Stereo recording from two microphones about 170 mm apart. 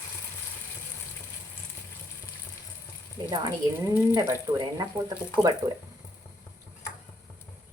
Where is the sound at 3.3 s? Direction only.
20° right (ahead or behind).